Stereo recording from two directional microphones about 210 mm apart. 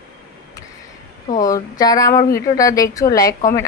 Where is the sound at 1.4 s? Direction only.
15° left (ahead or behind).